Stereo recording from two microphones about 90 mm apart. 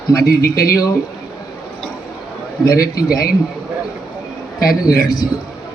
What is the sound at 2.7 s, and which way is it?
Speech, 40° left (ahead or behind).